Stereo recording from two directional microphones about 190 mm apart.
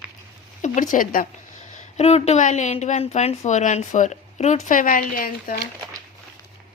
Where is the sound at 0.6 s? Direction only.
45° left (ahead or behind).